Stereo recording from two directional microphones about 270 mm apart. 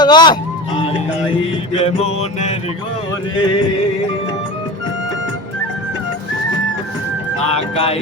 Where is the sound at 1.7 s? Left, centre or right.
Left.